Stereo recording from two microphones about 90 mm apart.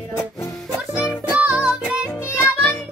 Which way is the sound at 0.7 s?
30° left (ahead or behind).